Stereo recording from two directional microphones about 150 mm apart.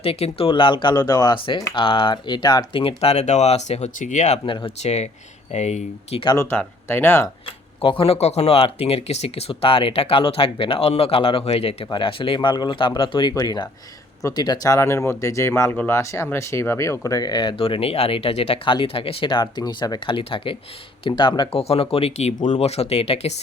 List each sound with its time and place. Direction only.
0.0 s speech: 40° left (ahead or behind)
4.4 s speech: 35° left (ahead or behind)
4.8 s speech: 50° left (ahead or behind)
6.3 s speech: 15° left (ahead or behind)
7.8 s speech: 35° left (ahead or behind)